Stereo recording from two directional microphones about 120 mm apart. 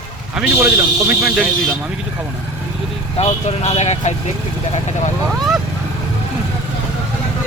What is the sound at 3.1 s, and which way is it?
Speech, 60° left (ahead or behind).